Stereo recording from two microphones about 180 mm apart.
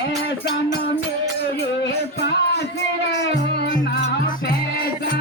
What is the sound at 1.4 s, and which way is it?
Music, 70° left (ahead or behind).